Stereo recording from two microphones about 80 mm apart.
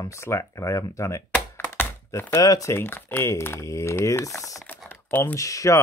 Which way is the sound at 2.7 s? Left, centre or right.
Left.